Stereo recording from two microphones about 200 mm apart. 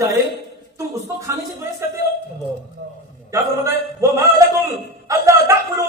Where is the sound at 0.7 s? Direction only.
15° right (ahead or behind).